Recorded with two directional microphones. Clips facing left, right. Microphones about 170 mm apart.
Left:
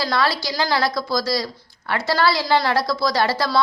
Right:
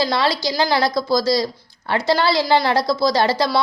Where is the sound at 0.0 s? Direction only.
25° right (ahead or behind).